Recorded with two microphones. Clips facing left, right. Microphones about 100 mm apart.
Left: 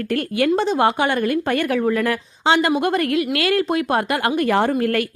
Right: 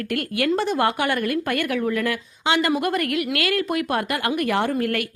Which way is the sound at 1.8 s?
40° left (ahead or behind).